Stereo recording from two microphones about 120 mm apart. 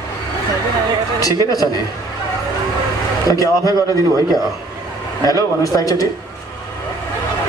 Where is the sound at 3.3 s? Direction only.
30° left (ahead or behind).